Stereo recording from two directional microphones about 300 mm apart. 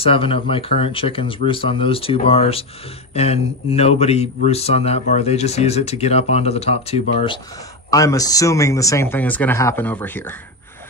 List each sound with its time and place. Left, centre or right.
0.0 s speech: centre